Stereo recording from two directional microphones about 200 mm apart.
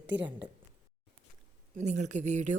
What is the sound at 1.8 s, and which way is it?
Speech, 35° right (ahead or behind).